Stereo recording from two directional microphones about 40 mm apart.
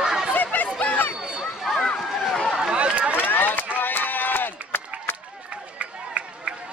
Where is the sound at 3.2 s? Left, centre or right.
Left.